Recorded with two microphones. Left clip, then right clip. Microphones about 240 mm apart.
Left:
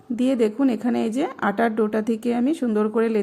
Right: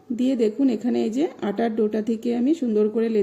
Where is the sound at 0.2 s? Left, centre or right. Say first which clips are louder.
Left 1 dB; left.